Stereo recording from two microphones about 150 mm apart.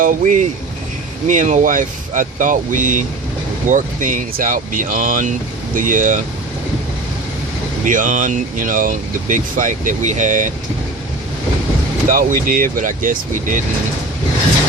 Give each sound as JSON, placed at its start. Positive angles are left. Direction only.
{"t": 0.0, "sound": "speech", "side_deg": -60}
{"t": 7.9, "sound": "speech", "side_deg": -60}
{"t": 12.0, "sound": "speech", "side_deg": -65}